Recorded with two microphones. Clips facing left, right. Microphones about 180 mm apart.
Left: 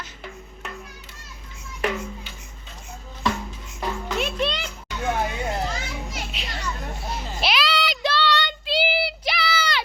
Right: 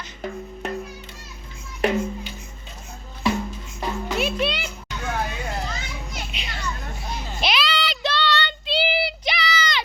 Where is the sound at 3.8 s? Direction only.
10° right (ahead or behind).